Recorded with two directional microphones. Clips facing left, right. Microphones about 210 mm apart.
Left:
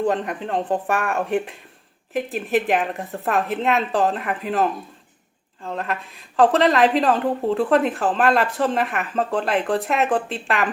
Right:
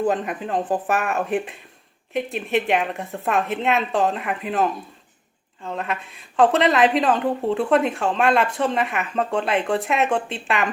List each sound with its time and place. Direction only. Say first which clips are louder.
0.0 s a woman's voice: even; 5° right (ahead or behind)